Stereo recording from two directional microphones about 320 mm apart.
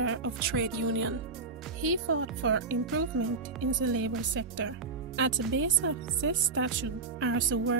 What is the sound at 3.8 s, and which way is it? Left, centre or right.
Speech, right.